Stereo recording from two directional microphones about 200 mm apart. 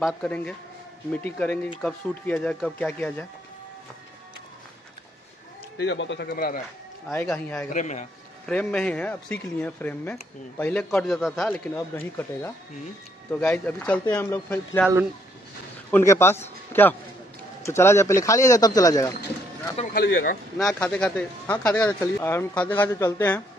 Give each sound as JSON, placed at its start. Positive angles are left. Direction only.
{"t": 0.0, "sound": "speech", "side_deg": 5}
{"t": 5.8, "sound": "speech", "side_deg": 65}
{"t": 7.1, "sound": "speech", "side_deg": 5}
{"t": 7.7, "sound": "a man's voice", "side_deg": 35}
{"t": 8.5, "sound": "speech", "side_deg": 5}
{"t": 15.9, "sound": "speech", "side_deg": 10}
{"t": 19.9, "sound": "speech", "side_deg": 45}
{"t": 20.5, "sound": "speech", "side_deg": 5}